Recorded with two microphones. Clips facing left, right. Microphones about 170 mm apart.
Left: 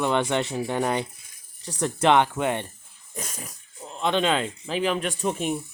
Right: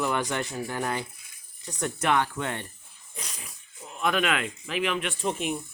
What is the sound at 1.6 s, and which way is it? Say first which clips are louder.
Speech: left 6 dB; 30° left (ahead or behind).